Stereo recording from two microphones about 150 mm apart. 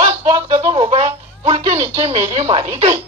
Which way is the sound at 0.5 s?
40° right (ahead or behind).